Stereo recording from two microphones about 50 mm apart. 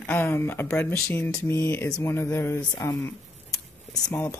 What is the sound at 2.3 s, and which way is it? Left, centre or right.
Speech, left.